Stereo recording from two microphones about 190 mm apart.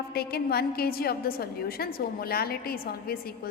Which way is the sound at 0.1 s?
55° left (ahead or behind).